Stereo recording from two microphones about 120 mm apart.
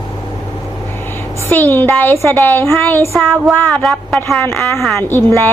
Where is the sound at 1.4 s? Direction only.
15° left (ahead or behind).